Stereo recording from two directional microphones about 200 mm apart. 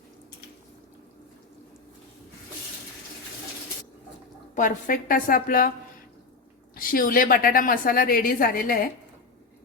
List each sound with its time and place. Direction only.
4.5 s a woman's voice: 40° left (ahead or behind)
6.7 s a woman's voice: 45° left (ahead or behind)